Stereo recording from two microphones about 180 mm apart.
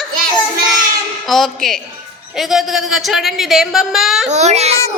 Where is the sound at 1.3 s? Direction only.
Centre (ahead or behind).